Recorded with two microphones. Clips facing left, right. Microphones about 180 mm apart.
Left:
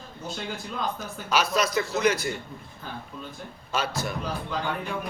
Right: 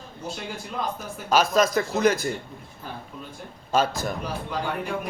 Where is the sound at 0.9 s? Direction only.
45° right (ahead or behind).